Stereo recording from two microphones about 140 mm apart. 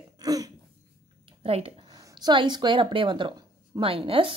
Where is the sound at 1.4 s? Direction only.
45° right (ahead or behind).